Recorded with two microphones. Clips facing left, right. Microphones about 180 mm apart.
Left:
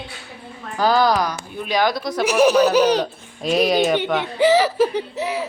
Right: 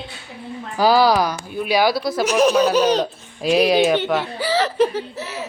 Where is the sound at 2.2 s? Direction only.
10° left (ahead or behind).